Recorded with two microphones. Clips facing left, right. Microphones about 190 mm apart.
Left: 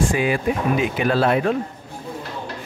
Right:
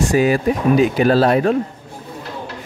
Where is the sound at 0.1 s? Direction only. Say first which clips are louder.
Right 5 dB; 40° right (ahead or behind).